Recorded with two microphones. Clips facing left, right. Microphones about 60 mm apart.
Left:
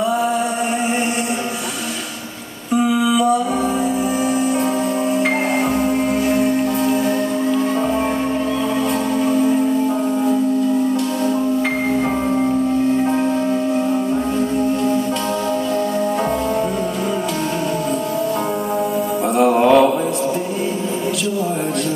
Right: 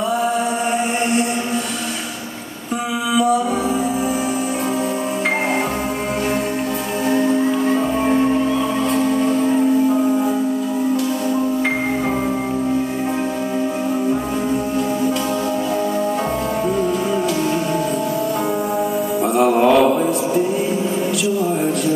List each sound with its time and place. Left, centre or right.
19.3 s mantra: centre